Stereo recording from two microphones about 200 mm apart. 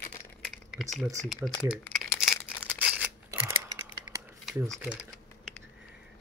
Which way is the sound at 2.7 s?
5° right (ahead or behind).